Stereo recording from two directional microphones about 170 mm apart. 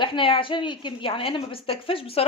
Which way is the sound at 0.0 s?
30° left (ahead or behind).